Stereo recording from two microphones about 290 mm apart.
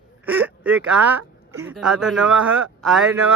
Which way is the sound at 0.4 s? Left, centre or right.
Centre.